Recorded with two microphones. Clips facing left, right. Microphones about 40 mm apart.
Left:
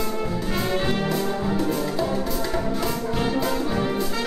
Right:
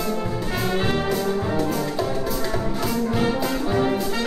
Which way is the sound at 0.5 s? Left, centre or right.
Centre.